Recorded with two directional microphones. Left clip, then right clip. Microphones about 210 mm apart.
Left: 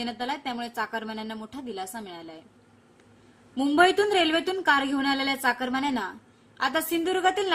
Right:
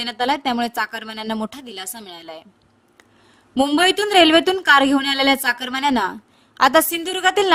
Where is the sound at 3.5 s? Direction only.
55° right (ahead or behind).